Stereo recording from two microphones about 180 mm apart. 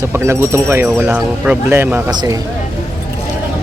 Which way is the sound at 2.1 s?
25° right (ahead or behind).